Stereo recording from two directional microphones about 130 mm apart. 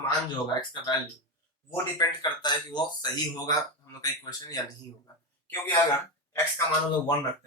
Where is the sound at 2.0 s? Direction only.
35° left (ahead or behind).